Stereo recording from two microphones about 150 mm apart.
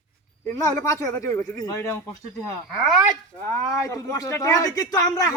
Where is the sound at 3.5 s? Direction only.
20° left (ahead or behind).